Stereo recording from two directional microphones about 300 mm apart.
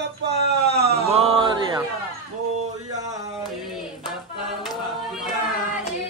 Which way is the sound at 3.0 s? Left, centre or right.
Centre.